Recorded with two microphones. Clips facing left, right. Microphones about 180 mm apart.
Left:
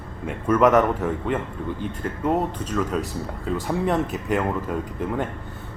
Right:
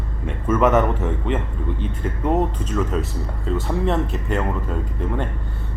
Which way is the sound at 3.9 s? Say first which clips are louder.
Left 1 dB; centre (ahead or behind).